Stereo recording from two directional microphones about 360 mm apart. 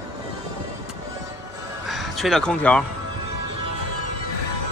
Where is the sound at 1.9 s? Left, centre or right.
Centre.